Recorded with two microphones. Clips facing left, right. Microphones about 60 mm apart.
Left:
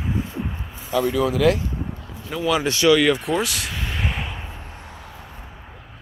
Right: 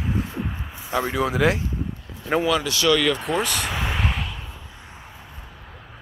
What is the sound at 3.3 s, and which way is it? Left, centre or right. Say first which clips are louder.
Speech: even; centre.